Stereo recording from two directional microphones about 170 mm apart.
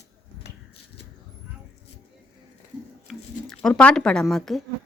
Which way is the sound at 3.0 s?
5° left (ahead or behind).